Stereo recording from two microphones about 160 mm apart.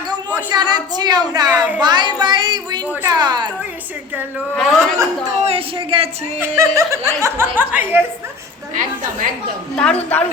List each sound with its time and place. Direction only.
0.5 s a woman's voice: 25° right (ahead or behind)
4.5 s a man's voice: centre (ahead or behind)
5.5 s speech: 35° right (ahead or behind)
6.4 s speech: 15° right (ahead or behind)
8.7 s a woman's voice: 55° right (ahead or behind)
9.7 s a woman's voice: 5° left (ahead or behind)